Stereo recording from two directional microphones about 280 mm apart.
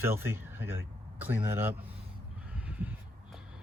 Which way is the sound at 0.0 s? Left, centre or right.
Centre.